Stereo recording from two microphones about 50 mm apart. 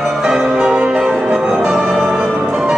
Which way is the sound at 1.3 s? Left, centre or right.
Centre.